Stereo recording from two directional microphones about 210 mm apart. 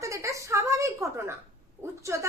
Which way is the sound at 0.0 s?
15° right (ahead or behind).